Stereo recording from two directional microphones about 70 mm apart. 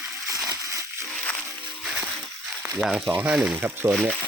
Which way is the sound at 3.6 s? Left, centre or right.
Right.